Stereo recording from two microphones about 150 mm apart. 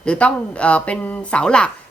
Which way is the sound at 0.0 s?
5° left (ahead or behind).